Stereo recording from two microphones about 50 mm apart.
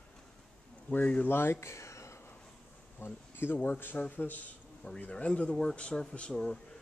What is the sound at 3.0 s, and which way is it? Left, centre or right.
Speech, left.